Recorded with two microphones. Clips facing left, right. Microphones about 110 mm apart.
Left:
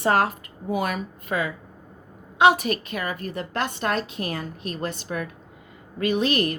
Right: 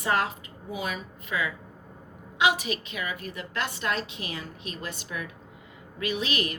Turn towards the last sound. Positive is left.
turn(degrees=40)  # may be behind; listen again after turning